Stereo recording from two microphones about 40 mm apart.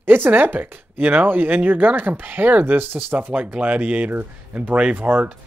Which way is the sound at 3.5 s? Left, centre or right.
Right.